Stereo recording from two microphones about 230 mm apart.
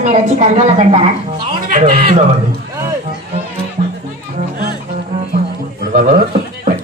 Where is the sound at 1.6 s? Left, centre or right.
Right.